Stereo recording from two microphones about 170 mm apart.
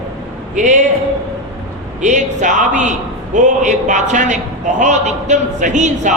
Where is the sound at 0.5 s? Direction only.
45° right (ahead or behind).